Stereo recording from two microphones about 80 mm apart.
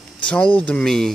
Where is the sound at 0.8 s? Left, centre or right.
Centre.